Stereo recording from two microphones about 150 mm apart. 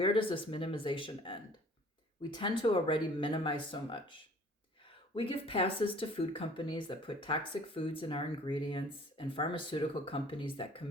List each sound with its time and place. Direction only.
0.0 s speech: 35° left (ahead or behind)